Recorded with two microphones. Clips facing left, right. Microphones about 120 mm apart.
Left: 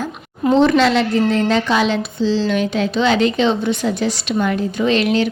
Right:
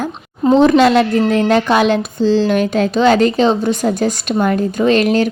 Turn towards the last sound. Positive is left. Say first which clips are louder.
# right 3 dB
turn(degrees=-45)  # may be behind; listen again after turning